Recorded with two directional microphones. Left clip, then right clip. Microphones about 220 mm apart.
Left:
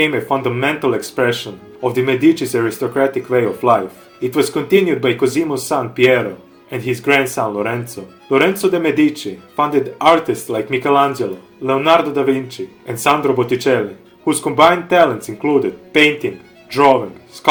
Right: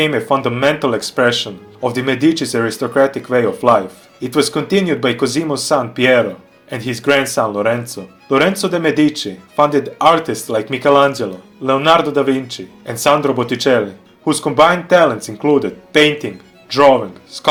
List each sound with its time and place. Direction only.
0.0 s speech: 40° right (ahead or behind)